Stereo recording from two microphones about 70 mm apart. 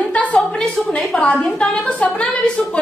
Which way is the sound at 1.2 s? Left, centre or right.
Centre.